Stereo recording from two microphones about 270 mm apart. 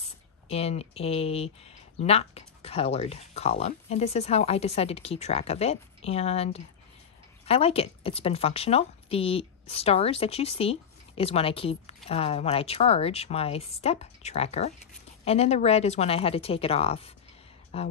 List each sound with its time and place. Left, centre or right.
0.0 s speech: left